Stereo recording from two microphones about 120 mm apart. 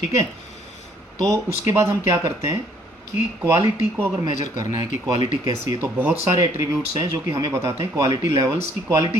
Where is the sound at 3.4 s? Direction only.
25° right (ahead or behind).